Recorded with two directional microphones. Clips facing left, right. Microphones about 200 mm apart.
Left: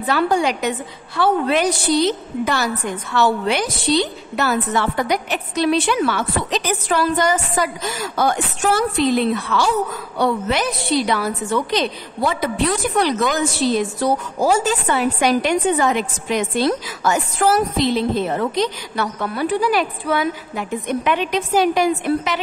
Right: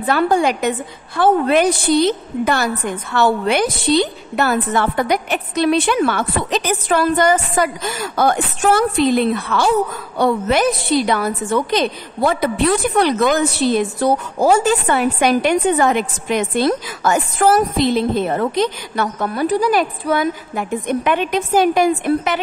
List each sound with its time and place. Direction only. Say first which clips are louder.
0.0 s a woman's voice: right 2 dB; 50° right (ahead or behind)